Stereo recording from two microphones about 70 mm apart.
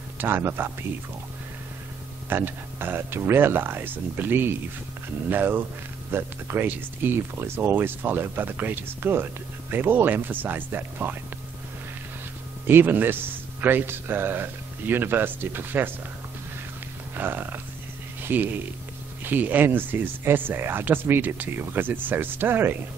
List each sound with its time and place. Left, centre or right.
0.2 s a man's voice: right
2.2 s a man's voice: right
12.6 s a man's voice: right
17.1 s speech: right